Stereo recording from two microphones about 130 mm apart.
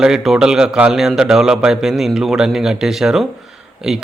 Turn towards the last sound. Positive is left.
turn(degrees=-5)  # may be behind; listen again after turning